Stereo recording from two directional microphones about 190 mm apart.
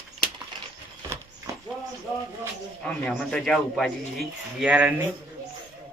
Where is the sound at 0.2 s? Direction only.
50° left (ahead or behind).